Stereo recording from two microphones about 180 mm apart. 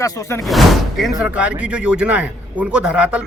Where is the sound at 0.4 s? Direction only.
Centre (ahead or behind).